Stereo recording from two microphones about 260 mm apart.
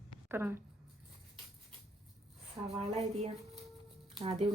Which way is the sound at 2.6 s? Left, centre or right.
Centre.